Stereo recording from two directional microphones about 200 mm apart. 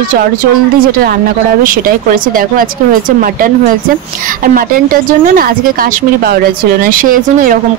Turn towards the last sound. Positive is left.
turn(degrees=-45)  # may be behind; listen again after turning